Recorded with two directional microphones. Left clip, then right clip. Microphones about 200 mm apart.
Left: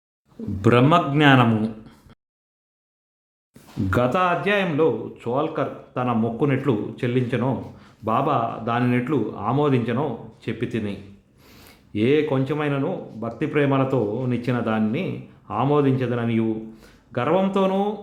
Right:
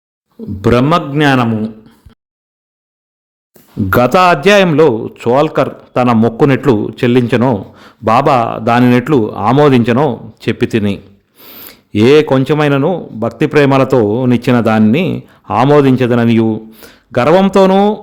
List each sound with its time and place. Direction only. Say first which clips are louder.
0.6 s a man's voice: right 6 dB; 30° right (ahead or behind)
3.8 s a man's voice: right 12 dB; 45° right (ahead or behind)